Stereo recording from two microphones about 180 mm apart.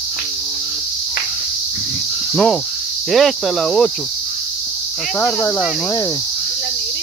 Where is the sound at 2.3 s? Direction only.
5° left (ahead or behind).